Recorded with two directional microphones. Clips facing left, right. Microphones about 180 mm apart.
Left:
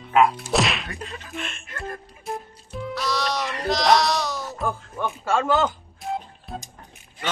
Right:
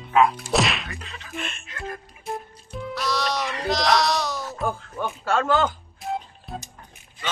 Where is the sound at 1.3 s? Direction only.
Centre (ahead or behind).